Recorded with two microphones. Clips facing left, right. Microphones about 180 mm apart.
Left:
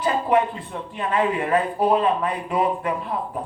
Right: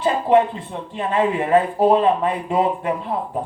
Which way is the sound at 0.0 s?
25° right (ahead or behind).